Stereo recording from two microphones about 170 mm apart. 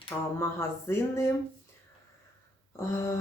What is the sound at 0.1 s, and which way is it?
Speech, 10° left (ahead or behind).